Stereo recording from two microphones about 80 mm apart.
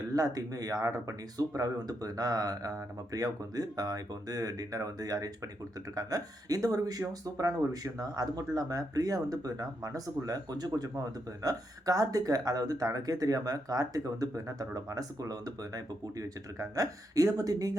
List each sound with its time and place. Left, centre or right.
0.1 s speech: right